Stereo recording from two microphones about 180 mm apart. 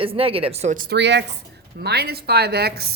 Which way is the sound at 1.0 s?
75° right (ahead or behind).